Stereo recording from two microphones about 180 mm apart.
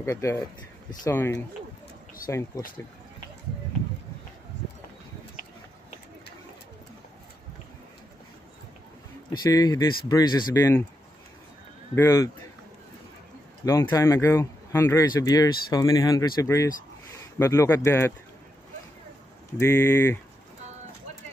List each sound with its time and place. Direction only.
0.0 s speech: 15° left (ahead or behind)
2.5 s speech: 20° left (ahead or behind)
9.4 s speech: 20° left (ahead or behind)
11.9 s speech: 15° left (ahead or behind)
13.7 s speech: 15° left (ahead or behind)
19.6 s speech: 15° left (ahead or behind)